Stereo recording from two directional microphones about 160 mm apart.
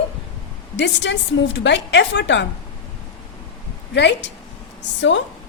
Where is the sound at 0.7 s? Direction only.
90° left.